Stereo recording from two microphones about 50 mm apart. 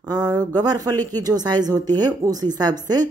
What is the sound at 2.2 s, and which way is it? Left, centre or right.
Speech, right.